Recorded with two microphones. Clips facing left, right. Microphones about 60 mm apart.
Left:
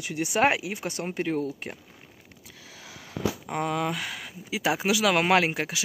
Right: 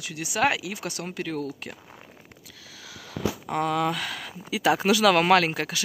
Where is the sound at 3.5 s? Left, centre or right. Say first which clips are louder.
Right 4 dB; centre.